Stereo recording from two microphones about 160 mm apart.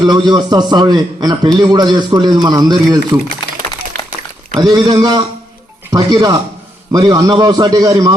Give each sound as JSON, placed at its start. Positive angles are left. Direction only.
{"t": 0.0, "sound": "a man's voice", "side_deg": -25}
{"t": 4.6, "sound": "a man's voice", "side_deg": -25}